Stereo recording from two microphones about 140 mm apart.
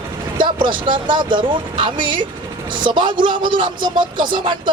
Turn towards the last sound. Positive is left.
turn(degrees=-35)  # may be behind; listen again after turning